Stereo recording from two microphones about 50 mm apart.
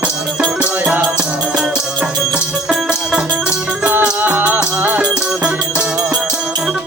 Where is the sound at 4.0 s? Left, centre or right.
Right.